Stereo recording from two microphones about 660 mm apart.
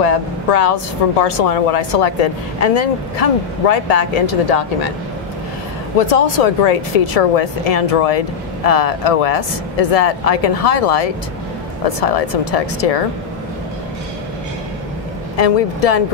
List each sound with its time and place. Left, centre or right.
0.0 s speech: left
5.9 s speech: left
15.3 s speech: left